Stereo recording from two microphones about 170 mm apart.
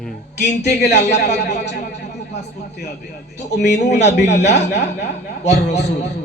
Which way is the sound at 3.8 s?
90° left.